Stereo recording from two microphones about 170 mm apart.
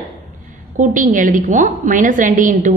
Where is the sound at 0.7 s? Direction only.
50° right (ahead or behind).